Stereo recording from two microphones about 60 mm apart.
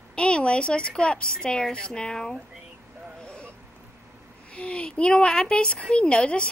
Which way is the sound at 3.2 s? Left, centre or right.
Centre.